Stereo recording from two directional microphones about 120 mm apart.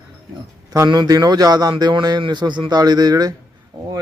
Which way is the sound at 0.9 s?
35° right (ahead or behind).